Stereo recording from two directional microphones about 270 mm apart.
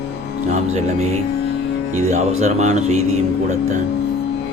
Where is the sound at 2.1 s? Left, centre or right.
Right.